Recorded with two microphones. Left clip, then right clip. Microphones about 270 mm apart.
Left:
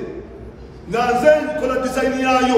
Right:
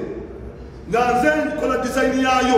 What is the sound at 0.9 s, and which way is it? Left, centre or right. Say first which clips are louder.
A man's voice: left 3 dB; centre.